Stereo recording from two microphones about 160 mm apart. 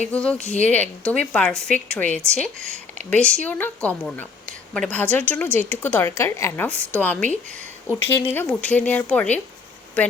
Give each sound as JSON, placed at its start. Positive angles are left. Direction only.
{"t": 0.1, "sound": "a woman's voice", "side_deg": 5}
{"t": 0.3, "sound": "speech", "side_deg": 45}
{"t": 0.6, "sound": "a woman's voice", "side_deg": 10}